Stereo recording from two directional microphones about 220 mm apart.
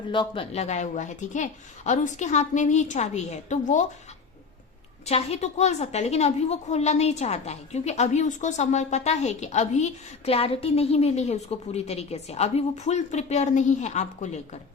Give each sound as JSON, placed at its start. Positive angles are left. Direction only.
{"t": 0.1, "sound": "a woman's voice", "side_deg": 25}
{"t": 5.0, "sound": "a woman's voice", "side_deg": 30}